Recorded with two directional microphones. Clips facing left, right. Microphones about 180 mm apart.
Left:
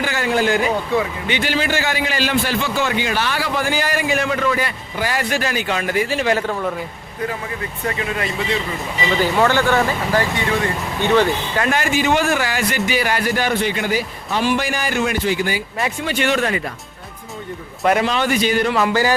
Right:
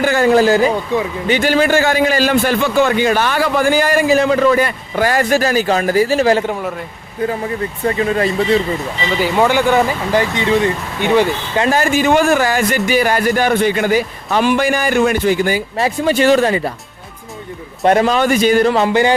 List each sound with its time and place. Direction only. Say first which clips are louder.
0.0 s a sound: right 8 dB; 45° right (ahead or behind)
1.3 s speech: right 9 dB; 45° right (ahead or behind)
4.1 s a man's voice: right 8 dB; 35° right (ahead or behind)
6.3 s speech: right 4 dB; 20° right (ahead or behind)
7.9 s a man's voice: right 8 dB; 35° right (ahead or behind)
9.0 s speech: right 2 dB; 10° right (ahead or behind)
11.6 s a man's voice: right 5 dB; 40° right (ahead or behind)
17.8 s a man's voice: right 5 dB; 35° right (ahead or behind)